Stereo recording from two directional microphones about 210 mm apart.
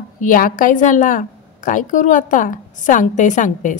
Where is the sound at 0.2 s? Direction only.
40° left (ahead or behind).